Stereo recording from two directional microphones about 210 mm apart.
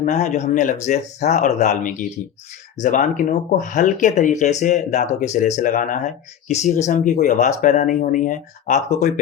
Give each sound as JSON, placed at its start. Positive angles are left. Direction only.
{"t": 0.0, "sound": "speech", "side_deg": 35}